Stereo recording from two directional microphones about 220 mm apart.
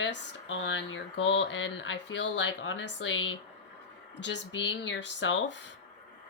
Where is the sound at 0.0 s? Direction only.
55° left (ahead or behind).